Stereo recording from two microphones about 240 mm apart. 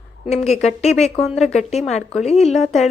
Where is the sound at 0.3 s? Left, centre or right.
Left.